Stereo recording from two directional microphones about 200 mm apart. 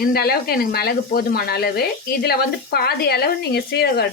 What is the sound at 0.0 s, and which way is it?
Speech, 50° left (ahead or behind).